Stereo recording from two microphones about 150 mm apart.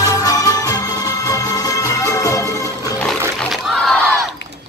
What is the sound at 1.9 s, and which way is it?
Music, 25° left (ahead or behind).